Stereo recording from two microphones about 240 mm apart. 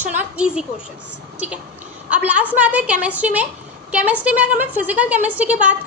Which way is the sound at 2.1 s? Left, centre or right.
Centre.